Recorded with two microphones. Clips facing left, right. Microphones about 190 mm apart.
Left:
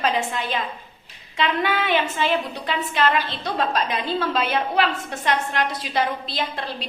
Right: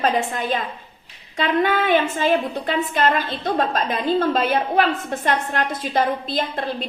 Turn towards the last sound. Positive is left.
turn(degrees=-45)  # may be behind; listen again after turning